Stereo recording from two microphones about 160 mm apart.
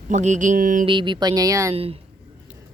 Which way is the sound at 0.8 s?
30° right (ahead or behind).